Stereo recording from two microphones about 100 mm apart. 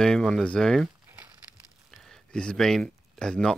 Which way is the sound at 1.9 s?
5° left (ahead or behind).